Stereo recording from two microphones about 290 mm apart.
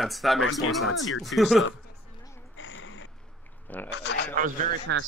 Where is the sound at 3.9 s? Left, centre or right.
Left.